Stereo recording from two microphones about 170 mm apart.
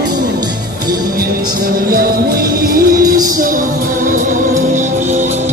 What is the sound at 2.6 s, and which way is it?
Music, 55° right (ahead or behind).